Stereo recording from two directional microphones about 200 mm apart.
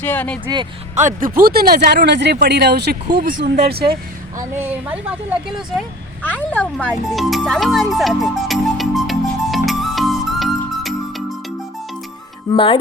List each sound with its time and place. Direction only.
0.0 s speech: 10° left (ahead or behind)
0.4 s speech: 25° right (ahead or behind)
0.9 s speech: 40° right (ahead or behind)
4.6 s speech: 5° right (ahead or behind)
6.3 s music: 10° left (ahead or behind)
12.5 s speech: 15° left (ahead or behind)